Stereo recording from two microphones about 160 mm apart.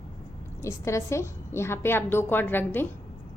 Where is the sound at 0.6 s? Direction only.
20° left (ahead or behind).